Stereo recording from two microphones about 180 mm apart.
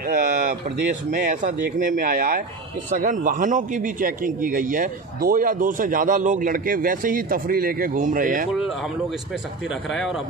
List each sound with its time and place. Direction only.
0.0 s a sound: 50° right (ahead or behind)
1.1 s speech: 45° right (ahead or behind)
8.5 s speech: centre (ahead or behind)